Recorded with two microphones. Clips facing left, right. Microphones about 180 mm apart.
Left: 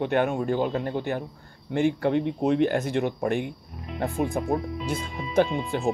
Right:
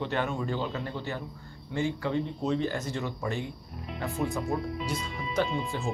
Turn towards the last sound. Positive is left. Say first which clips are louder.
# left 6 dB
turn(degrees=55)  # may be behind; listen again after turning